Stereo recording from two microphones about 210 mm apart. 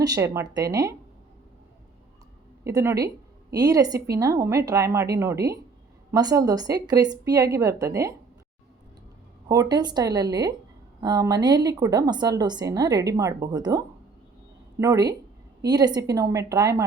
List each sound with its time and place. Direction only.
0.0 s a woman's voice: 15° right (ahead or behind)
2.6 s a woman's voice: 15° right (ahead or behind)
9.5 s a woman's voice: 20° right (ahead or behind)